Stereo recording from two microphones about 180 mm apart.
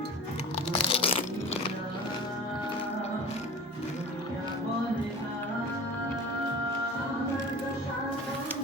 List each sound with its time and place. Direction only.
0.8 s crunch: 30° left (ahead or behind)